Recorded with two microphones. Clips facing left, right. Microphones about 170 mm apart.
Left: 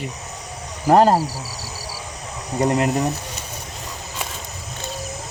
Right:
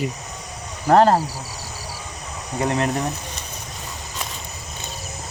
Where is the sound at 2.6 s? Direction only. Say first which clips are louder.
Left 3 dB; 15° left (ahead or behind).